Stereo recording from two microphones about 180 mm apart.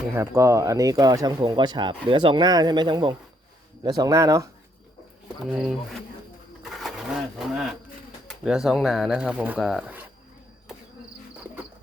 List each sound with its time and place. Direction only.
0.1 s speech: 15° right (ahead or behind)
5.5 s speech: centre (ahead or behind)
6.6 s a sound: centre (ahead or behind)
8.4 s speech: centre (ahead or behind)